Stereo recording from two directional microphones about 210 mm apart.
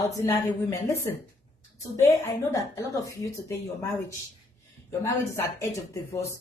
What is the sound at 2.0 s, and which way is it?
Speech, 15° left (ahead or behind).